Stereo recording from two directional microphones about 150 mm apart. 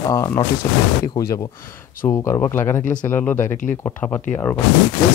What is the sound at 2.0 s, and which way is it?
Speech, 20° left (ahead or behind).